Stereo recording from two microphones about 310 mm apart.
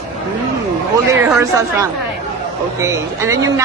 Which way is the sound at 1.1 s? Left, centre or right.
Centre.